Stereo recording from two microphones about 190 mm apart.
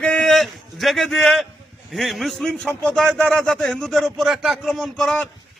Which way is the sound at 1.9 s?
Centre (ahead or behind).